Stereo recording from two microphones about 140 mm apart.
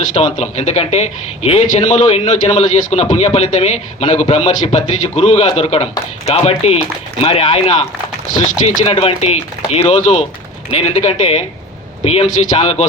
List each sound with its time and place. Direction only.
0.2 s speech: 50° left (ahead or behind)